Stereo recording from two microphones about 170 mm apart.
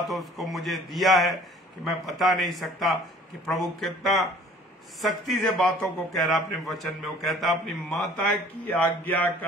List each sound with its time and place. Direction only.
0.1 s a man's voice: centre (ahead or behind)